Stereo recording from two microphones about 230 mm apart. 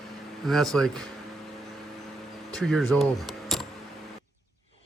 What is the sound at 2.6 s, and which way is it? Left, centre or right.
Speech, centre.